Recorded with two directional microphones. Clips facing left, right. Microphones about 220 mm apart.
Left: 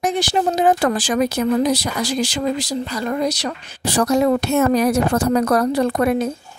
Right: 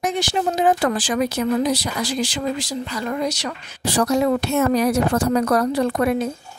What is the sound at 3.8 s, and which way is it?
Speech, 45° left (ahead or behind).